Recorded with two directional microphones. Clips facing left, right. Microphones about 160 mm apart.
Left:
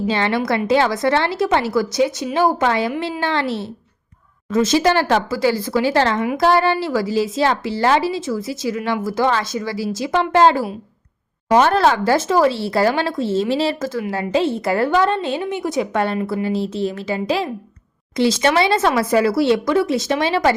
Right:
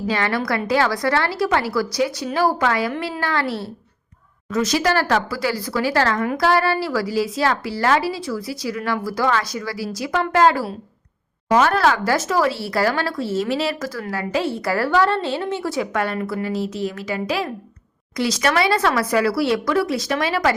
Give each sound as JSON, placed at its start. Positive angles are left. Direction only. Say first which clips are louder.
{"t": 0.1, "sound": "a woman's voice", "louder": "left 1 dB", "side_deg": 25}